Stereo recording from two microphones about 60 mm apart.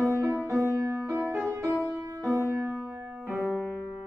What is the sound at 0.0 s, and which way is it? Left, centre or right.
Music, right.